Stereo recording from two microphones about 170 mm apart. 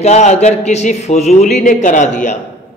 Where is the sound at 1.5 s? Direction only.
50° left (ahead or behind).